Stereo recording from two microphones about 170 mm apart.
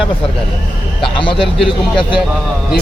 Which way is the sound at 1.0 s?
30° left (ahead or behind).